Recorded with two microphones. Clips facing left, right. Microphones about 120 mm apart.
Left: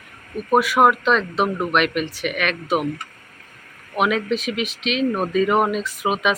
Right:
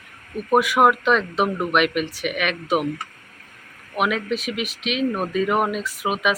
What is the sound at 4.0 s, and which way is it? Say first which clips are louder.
Speech: left 2 dB; 5° right (ahead or behind).